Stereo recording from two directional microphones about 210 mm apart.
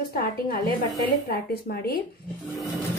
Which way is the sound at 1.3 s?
45° left (ahead or behind).